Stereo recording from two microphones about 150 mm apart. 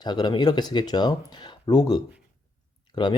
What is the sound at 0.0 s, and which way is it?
Speech, 30° left (ahead or behind).